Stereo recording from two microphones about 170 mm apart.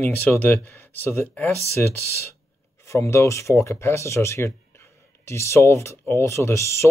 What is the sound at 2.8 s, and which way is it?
Speech, 15° left (ahead or behind).